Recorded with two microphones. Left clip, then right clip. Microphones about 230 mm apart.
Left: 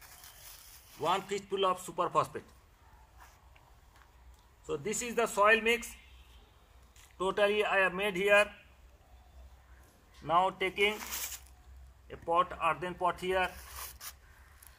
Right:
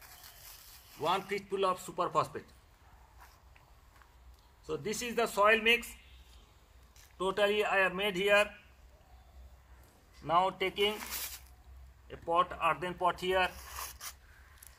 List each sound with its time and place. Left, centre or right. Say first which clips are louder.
0.0 s a sound: even; centre
2.3 s speech: left 1 dB; centre
4.6 s speech: left 1 dB; centre
7.2 s speech: left 1 dB; centre
10.2 s speech: left 1 dB; centre
13.8 s a sound: right 2 dB; right